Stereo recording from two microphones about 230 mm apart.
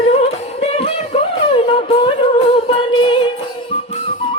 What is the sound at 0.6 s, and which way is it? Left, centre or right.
Music, left.